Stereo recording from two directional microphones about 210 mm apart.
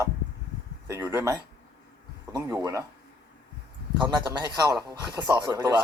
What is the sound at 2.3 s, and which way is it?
Speech, 15° right (ahead or behind).